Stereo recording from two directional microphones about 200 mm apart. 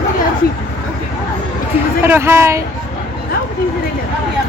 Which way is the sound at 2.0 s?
10° right (ahead or behind).